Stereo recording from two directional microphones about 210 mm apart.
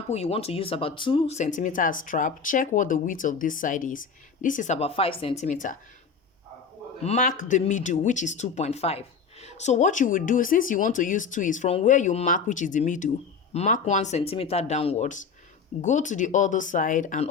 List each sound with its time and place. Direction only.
0.1 s speech: 30° left (ahead or behind)
7.0 s speech: 35° left (ahead or behind)